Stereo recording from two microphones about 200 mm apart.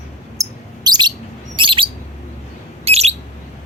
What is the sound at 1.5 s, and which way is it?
Chirp, 25° right (ahead or behind).